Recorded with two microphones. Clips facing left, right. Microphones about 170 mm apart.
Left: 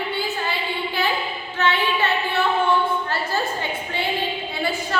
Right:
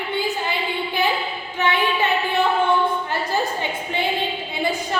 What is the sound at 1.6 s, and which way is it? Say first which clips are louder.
Child singing: right 1 dB; 15° right (ahead or behind).